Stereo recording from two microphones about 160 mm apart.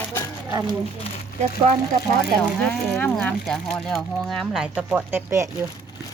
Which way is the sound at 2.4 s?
5° left (ahead or behind).